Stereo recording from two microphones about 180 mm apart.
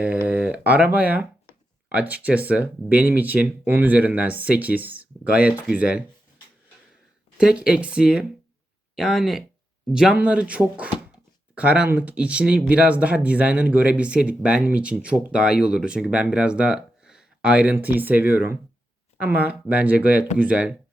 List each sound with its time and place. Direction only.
0.0 s speech: 10° right (ahead or behind)
7.3 s speech: 5° right (ahead or behind)